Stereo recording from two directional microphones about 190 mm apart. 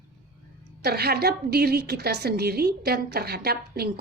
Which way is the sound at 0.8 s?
55° right (ahead or behind).